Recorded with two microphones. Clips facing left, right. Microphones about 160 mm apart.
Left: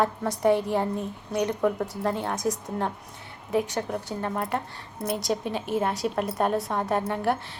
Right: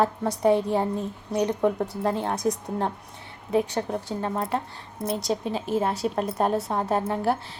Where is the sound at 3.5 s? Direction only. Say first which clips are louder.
Right 2 dB; 30° right (ahead or behind).